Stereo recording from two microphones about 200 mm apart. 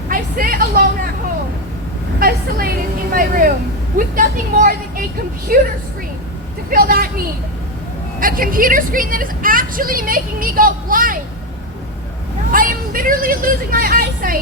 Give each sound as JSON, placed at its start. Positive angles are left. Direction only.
{"t": 0.1, "sound": "vehicle", "side_deg": -45}
{"t": 2.1, "sound": "a woman's voice", "side_deg": -50}
{"t": 6.7, "sound": "a woman's voice", "side_deg": -50}
{"t": 8.2, "sound": "a woman's voice", "side_deg": -45}
{"t": 12.5, "sound": "a sound", "side_deg": -45}